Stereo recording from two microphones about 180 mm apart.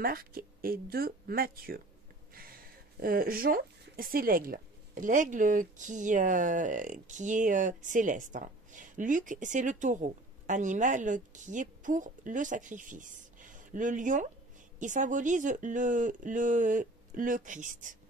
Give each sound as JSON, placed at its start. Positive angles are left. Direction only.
{"t": 0.0, "sound": "speech", "side_deg": -55}